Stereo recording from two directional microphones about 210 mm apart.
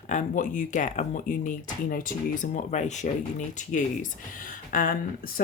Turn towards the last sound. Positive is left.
turn(degrees=40)  # may be behind; listen again after turning